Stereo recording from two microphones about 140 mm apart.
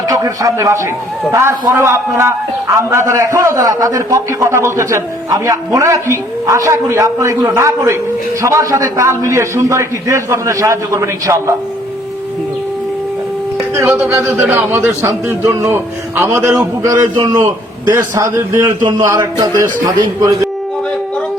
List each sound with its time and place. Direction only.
0.1 s a man's voice: 25° right (ahead or behind)
13.7 s a man's voice: 20° right (ahead or behind)
18.8 s a man's voice: 35° right (ahead or behind)
19.0 s a man's voice: 20° right (ahead or behind)